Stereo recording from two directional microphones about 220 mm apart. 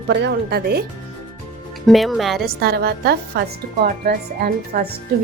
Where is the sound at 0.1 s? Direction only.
50° right (ahead or behind).